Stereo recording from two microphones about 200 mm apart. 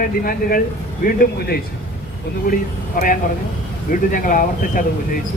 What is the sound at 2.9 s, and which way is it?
Speech, 45° left (ahead or behind).